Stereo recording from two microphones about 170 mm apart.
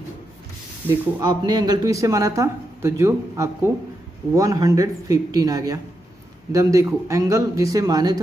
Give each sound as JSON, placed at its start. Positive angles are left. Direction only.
{"t": 1.2, "sound": "speech", "side_deg": -25}